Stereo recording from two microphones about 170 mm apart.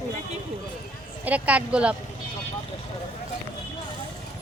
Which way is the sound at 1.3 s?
10° right (ahead or behind).